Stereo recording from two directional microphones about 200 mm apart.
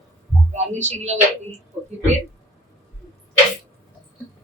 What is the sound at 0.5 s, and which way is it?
Speech, 35° right (ahead or behind).